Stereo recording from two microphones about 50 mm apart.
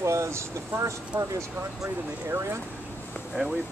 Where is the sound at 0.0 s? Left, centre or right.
Right.